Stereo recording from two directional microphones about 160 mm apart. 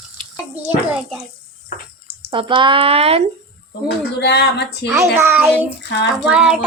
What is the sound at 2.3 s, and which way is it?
Speech, 30° right (ahead or behind).